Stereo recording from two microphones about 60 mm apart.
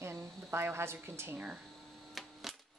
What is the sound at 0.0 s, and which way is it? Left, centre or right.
A woman's voice, right.